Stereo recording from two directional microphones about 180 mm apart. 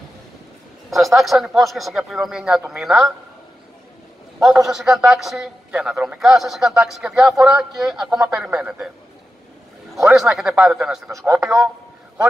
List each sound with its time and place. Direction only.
0.8 s a man's voice: centre (ahead or behind)
4.4 s a man's voice: centre (ahead or behind)
10.0 s a man's voice: centre (ahead or behind)
11.1 s a man's voice: 15° right (ahead or behind)